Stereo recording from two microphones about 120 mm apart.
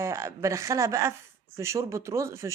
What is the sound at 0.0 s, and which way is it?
A woman's voice, 25° right (ahead or behind).